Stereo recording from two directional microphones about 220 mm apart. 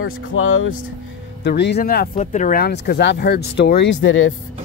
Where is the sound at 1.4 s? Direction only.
50° left (ahead or behind).